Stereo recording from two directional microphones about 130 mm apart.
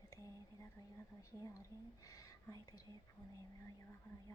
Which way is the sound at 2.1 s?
25° left (ahead or behind).